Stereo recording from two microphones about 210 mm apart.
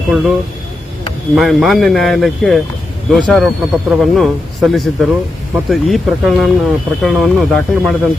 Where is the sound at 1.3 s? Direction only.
Centre (ahead or behind).